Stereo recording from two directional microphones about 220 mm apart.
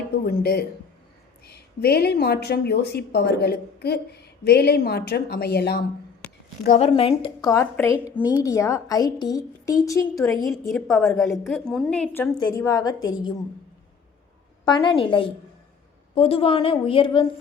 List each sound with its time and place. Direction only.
0.3 s speech: 45° left (ahead or behind)
6.7 s a woman's voice: 25° left (ahead or behind)
7.5 s a woman's voice: 15° left (ahead or behind)
12.4 s a woman's voice: 15° left (ahead or behind)
14.6 s a woman's voice: 20° left (ahead or behind)